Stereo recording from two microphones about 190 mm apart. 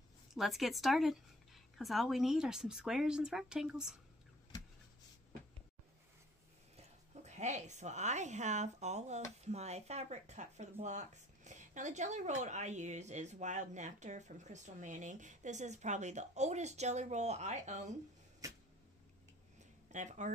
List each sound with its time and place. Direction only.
0.3 s speech: centre (ahead or behind)
6.8 s a woman's voice: 35° right (ahead or behind)
18.4 s a sound: 15° right (ahead or behind)
19.9 s speech: 40° right (ahead or behind)